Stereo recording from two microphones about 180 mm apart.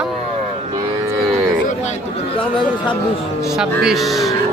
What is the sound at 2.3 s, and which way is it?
Speech, 30° left (ahead or behind).